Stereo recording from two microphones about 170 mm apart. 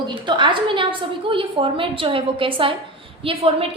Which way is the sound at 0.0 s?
25° right (ahead or behind).